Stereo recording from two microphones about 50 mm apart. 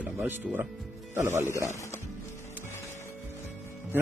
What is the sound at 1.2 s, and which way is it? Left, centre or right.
Speech, right.